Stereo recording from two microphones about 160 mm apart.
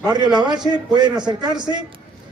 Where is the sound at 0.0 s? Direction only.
25° right (ahead or behind).